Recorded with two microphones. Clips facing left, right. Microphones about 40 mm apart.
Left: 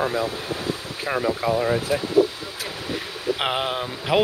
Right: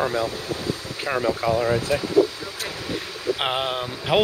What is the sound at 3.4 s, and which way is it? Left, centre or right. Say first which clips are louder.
Speech: left 1 dB; centre.